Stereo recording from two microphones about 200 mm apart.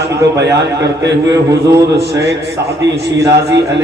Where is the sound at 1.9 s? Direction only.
55° right (ahead or behind).